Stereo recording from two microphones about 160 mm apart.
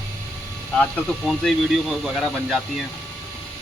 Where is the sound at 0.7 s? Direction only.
5° left (ahead or behind).